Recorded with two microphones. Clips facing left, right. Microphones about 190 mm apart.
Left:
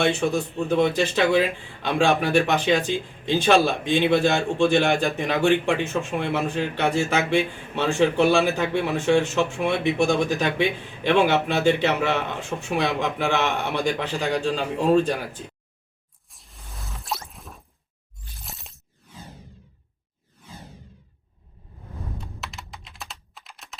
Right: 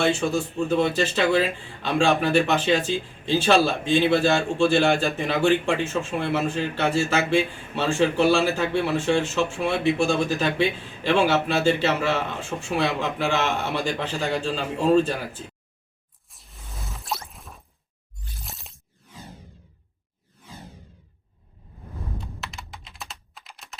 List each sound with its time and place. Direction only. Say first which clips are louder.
0.0 s speech: left 1 dB; 15° left (ahead or behind)
16.3 s a sound: right 2 dB; centre (ahead or behind)
22.4 s computer keyboard: even; centre (ahead or behind)